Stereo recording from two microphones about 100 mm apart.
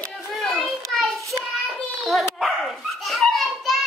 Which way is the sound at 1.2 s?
30° right (ahead or behind).